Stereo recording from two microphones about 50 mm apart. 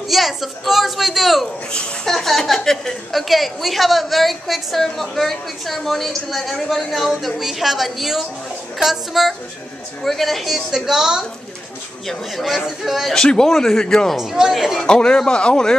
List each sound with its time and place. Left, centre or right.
0.1 s a woman's voice: centre
12.1 s a woman's voice: centre
13.1 s speech: centre
14.1 s a woman's voice: centre
14.9 s speech: centre